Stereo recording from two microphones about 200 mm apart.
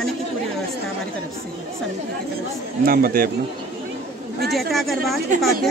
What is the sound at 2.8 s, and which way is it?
Speech, 50° right (ahead or behind).